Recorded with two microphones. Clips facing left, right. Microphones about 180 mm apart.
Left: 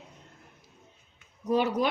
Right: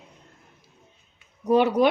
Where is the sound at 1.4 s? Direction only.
65° right (ahead or behind).